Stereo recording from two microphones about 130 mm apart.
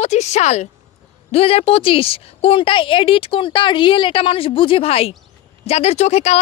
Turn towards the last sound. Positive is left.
turn(degrees=55)  # may be behind; listen again after turning